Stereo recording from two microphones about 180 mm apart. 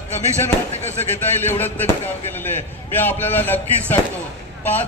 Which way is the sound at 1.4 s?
10° left (ahead or behind).